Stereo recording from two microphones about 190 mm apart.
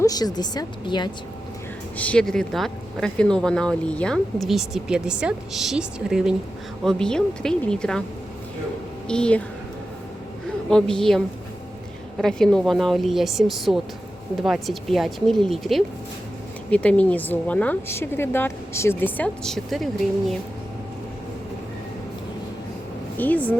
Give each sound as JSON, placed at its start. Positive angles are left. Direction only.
{"t": 0.0, "sound": "a woman's voice", "side_deg": 20}
{"t": 2.0, "sound": "speech", "side_deg": 5}
{"t": 9.0, "sound": "speech", "side_deg": 5}
{"t": 10.7, "sound": "speech", "side_deg": 5}
{"t": 12.2, "sound": "a woman's voice", "side_deg": 5}
{"t": 23.1, "sound": "speech", "side_deg": 10}